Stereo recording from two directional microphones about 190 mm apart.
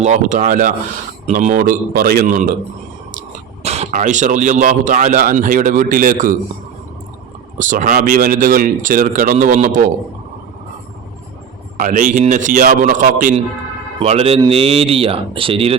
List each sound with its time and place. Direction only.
0.0 s speech: 40° right (ahead or behind)
3.6 s speech: 35° right (ahead or behind)
7.6 s speech: 45° right (ahead or behind)
11.8 s speech: 45° right (ahead or behind)
14.0 s speech: 30° right (ahead or behind)